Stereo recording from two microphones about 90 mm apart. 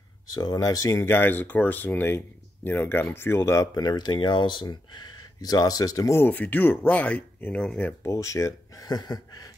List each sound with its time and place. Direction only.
0.3 s speech: 45° left (ahead or behind)
6.1 s speech: 20° left (ahead or behind)
8.0 s speech: 35° left (ahead or behind)